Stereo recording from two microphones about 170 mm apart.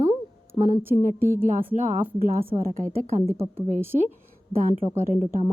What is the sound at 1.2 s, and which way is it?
Speech, 15° right (ahead or behind).